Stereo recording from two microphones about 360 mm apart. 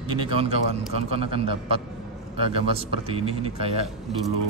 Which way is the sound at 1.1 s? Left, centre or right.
Centre.